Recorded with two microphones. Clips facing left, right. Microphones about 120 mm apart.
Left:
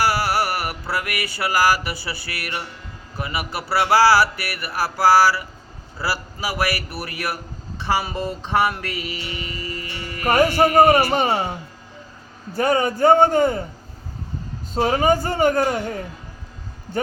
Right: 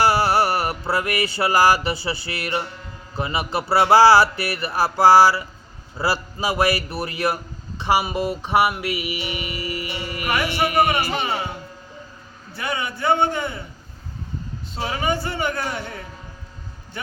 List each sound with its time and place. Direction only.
0.0 s music: 25° right (ahead or behind)
10.2 s speech: 40° left (ahead or behind)
12.5 s a man's voice: 40° left (ahead or behind)
14.7 s a man's voice: 45° left (ahead or behind)